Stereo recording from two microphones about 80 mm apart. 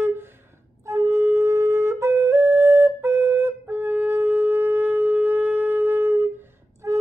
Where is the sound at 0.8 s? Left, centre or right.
Right.